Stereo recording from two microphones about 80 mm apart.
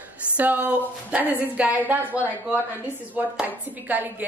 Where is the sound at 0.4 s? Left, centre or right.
Right.